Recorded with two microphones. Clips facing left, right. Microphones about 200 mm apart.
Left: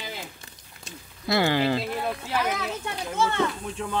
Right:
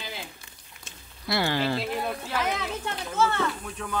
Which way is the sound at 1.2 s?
20° left (ahead or behind).